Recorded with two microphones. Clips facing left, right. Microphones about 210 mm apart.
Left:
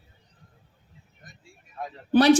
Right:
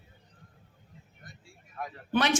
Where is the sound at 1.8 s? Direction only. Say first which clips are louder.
Left 8 dB; 30° left (ahead or behind).